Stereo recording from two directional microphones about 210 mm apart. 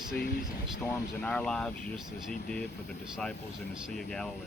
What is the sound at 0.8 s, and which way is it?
Speech, 10° left (ahead or behind).